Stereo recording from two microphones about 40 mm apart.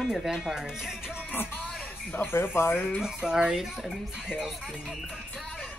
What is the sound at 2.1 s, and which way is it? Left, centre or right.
Speech, left.